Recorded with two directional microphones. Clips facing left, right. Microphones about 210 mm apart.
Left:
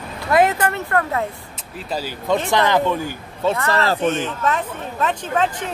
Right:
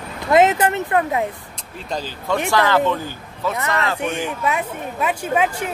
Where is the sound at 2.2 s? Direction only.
20° left (ahead or behind).